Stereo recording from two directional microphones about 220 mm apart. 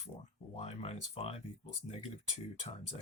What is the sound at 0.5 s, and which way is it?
Speech, 25° left (ahead or behind).